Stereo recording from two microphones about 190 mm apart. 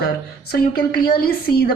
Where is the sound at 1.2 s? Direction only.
55° left (ahead or behind).